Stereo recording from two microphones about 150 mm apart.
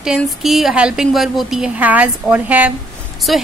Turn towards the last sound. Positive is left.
turn(degrees=0)  # may be behind; listen again after turning